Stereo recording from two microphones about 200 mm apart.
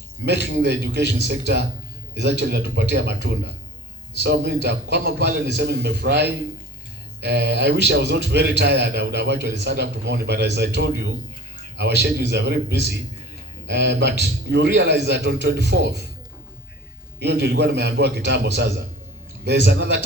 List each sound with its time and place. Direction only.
0.3 s a man's voice: 55° right (ahead or behind)
4.2 s a man's voice: 55° right (ahead or behind)
17.2 s a man's voice: 55° right (ahead or behind)